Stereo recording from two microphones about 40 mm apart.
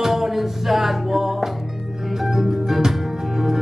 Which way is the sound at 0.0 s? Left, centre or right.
Centre.